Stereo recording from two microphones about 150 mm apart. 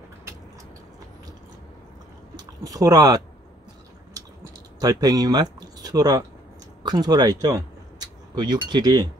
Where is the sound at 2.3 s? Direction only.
25° right (ahead or behind).